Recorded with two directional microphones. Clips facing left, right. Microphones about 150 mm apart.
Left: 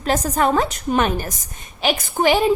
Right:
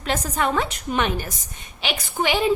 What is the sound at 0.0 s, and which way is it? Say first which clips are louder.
A woman's voice: left 5 dB; 40° left (ahead or behind).